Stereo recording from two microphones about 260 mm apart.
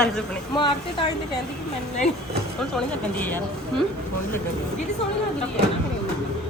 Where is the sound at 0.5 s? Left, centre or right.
Centre.